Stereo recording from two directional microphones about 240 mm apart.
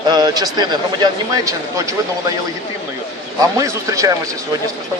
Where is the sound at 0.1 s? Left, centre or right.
Centre.